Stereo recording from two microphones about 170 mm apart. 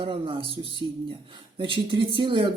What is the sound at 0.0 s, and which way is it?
Speech, 30° right (ahead or behind).